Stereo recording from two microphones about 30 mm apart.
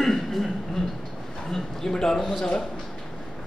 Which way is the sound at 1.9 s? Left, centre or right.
Left.